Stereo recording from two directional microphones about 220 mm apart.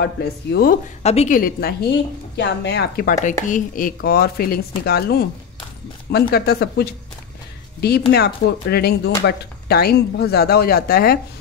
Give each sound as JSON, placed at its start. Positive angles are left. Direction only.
{"t": 0.0, "sound": "a woman's voice", "side_deg": 45}
{"t": 1.0, "sound": "a woman's voice", "side_deg": 30}
{"t": 6.3, "sound": "a woman's voice", "side_deg": 45}
{"t": 8.1, "sound": "a woman's voice", "side_deg": 45}